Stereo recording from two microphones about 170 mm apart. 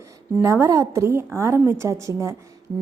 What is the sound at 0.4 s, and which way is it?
A woman's voice, 15° right (ahead or behind).